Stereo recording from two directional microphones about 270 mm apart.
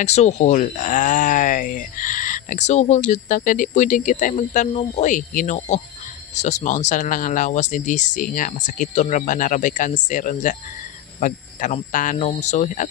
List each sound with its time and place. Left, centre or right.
0.0 s speech: left